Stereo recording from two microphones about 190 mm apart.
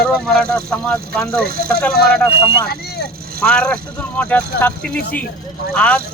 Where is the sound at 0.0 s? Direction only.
5° left (ahead or behind).